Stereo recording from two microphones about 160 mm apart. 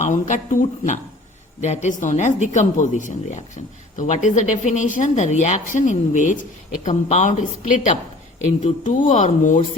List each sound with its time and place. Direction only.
0.0 s speech: 50° left (ahead or behind)